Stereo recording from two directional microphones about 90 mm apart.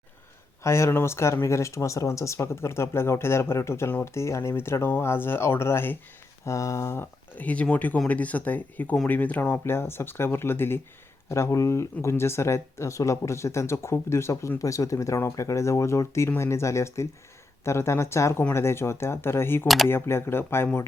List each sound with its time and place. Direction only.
0.6 s speech: 30° left (ahead or behind)
19.6 s speech: centre (ahead or behind)
19.9 s speech: 25° left (ahead or behind)